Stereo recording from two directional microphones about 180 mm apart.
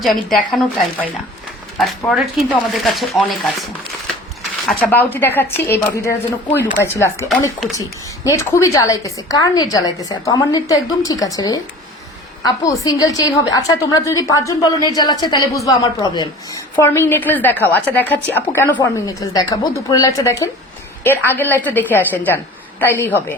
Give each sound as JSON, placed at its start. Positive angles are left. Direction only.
{"t": 0.0, "sound": "speech", "side_deg": 0}
{"t": 2.0, "sound": "speech", "side_deg": 0}
{"t": 4.6, "sound": "a woman's voice", "side_deg": 5}